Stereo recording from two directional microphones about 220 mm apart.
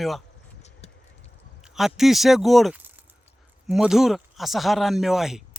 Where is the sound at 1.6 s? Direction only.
Centre (ahead or behind).